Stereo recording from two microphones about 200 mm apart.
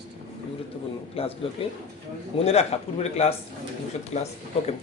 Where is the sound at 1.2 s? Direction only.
30° left (ahead or behind).